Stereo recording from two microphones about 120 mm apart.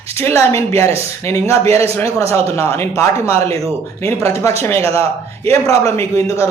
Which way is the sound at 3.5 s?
60° right (ahead or behind).